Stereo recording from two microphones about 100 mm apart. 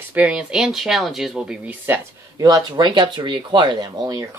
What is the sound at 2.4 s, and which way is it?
Speech, 40° right (ahead or behind).